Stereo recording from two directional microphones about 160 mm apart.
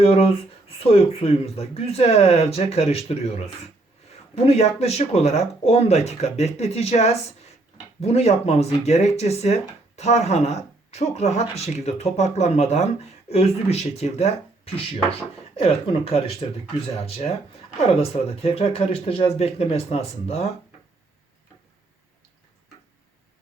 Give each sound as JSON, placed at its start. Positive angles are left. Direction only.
{"t": 0.0, "sound": "speech", "side_deg": 40}
{"t": 4.4, "sound": "speech", "side_deg": 40}